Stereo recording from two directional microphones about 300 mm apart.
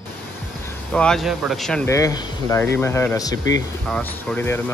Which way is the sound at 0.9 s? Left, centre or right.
Centre.